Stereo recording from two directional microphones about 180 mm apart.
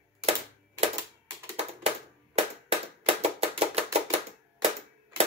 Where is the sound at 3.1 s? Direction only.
35° right (ahead or behind).